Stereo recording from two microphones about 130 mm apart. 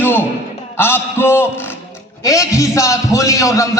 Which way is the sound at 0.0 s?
15° left (ahead or behind).